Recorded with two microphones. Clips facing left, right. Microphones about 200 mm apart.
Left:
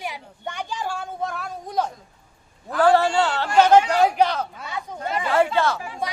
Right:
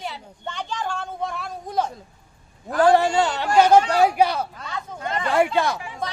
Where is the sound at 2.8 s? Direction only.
15° right (ahead or behind).